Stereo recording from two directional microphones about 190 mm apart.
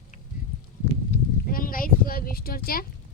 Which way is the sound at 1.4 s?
50° left (ahead or behind).